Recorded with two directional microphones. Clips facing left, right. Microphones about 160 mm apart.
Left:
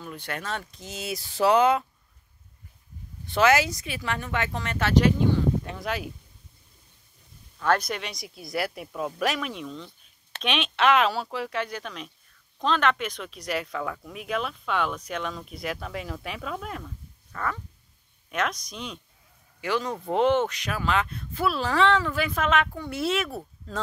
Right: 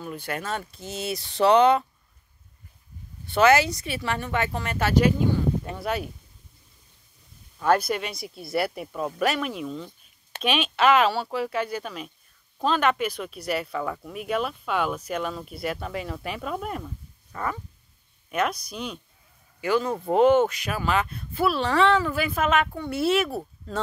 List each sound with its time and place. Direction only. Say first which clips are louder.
0.0 s speech: right 3 dB; 5° right (ahead or behind)
3.3 s speech: right 2 dB; centre (ahead or behind)
7.5 s speech: right 3 dB; 10° right (ahead or behind)
17.3 s dog: right 1 dB; 15° right (ahead or behind)
18.3 s speech: right 3 dB; 10° right (ahead or behind)